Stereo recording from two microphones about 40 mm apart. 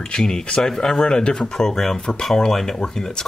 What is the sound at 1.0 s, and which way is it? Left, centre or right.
Speech, left.